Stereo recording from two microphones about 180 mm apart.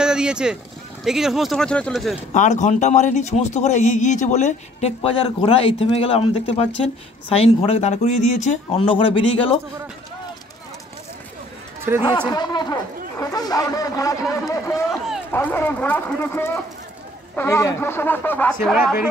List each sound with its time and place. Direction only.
0.0 s speech: 5° right (ahead or behind)
2.3 s a man's voice: 40° left (ahead or behind)
12.3 s speech: 25° left (ahead or behind)
14.9 s a sound: centre (ahead or behind)
15.3 s speech: 10° left (ahead or behind)